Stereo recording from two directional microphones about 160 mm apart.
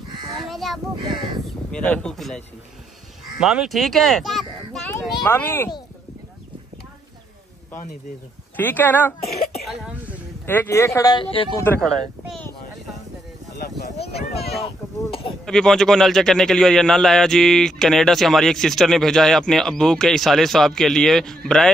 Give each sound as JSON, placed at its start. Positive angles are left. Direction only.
{"t": 0.1, "sound": "livestock", "side_deg": -30}
{"t": 0.5, "sound": "a sound", "side_deg": 0}
{"t": 0.9, "sound": "speech", "side_deg": -30}
{"t": 1.7, "sound": "a man's voice", "side_deg": 5}
{"t": 5.2, "sound": "speech", "side_deg": 15}
{"t": 8.5, "sound": "speech", "side_deg": 10}
{"t": 9.7, "sound": "a man's voice", "side_deg": -5}
{"t": 10.4, "sound": "speech", "side_deg": 15}
{"t": 11.8, "sound": "speech", "side_deg": 0}
{"t": 14.3, "sound": "a sound", "side_deg": 40}
{"t": 15.4, "sound": "a man's voice", "side_deg": 5}